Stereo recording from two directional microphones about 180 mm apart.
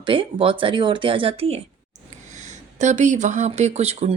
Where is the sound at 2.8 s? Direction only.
40° right (ahead or behind).